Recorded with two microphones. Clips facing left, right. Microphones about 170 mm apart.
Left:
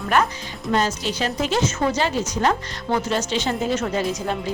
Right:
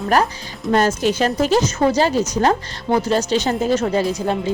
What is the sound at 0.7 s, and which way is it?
Speech, 50° right (ahead or behind).